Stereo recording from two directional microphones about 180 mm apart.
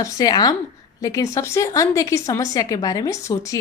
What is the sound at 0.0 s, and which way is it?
Speech, 20° left (ahead or behind).